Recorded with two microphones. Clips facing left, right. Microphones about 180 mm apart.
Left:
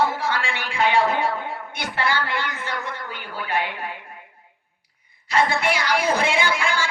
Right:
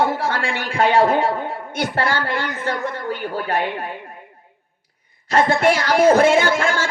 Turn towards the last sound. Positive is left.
turn(degrees=-45)  # may be behind; listen again after turning